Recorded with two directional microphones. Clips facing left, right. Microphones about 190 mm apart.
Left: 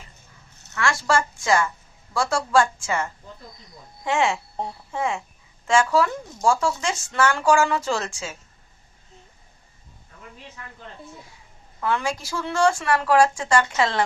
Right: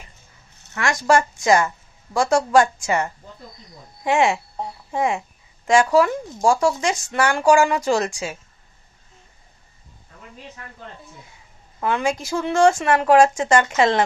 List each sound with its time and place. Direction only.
0.8 s speech: 20° right (ahead or behind)
11.8 s speech: 20° right (ahead or behind)